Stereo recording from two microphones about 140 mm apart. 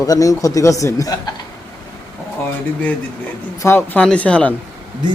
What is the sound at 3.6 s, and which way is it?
Speech, 15° left (ahead or behind).